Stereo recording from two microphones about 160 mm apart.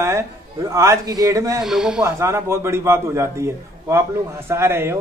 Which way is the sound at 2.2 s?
15° right (ahead or behind).